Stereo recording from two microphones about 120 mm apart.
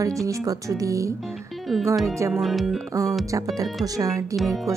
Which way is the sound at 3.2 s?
30° right (ahead or behind).